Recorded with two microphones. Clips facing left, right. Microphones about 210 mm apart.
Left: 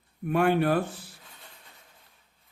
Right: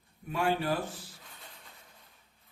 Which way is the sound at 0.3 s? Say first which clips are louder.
Left 7 dB; 60° left (ahead or behind).